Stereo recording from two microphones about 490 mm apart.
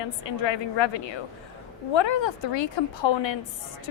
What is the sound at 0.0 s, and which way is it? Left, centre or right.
A woman's voice, left.